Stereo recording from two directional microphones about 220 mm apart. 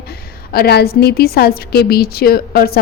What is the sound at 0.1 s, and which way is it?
A woman's voice, 45° left (ahead or behind).